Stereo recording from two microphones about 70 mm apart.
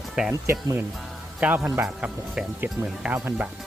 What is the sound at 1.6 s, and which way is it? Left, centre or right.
Speech, right.